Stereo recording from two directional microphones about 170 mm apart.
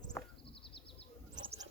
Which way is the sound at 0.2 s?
10° left (ahead or behind).